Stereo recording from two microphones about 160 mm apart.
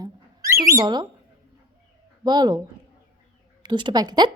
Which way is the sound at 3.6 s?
30° right (ahead or behind).